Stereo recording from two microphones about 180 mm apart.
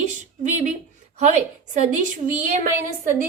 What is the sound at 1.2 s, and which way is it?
Speech, 40° right (ahead or behind).